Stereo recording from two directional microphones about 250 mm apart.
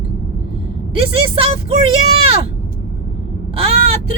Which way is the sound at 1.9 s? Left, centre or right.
Right.